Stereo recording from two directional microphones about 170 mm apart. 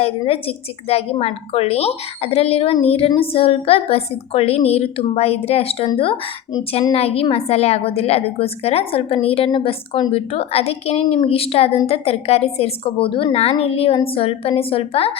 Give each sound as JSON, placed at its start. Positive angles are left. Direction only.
{"t": 0.0, "sound": "a woman's voice", "side_deg": 35}